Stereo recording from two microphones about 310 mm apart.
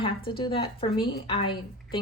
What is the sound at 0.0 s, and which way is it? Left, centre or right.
A woman's voice, centre.